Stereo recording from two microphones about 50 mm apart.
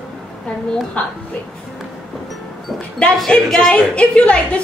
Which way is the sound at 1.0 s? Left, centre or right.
Left.